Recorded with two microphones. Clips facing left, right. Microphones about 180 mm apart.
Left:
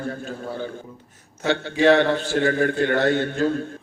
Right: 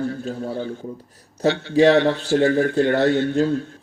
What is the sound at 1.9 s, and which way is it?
A man's voice, 55° left (ahead or behind).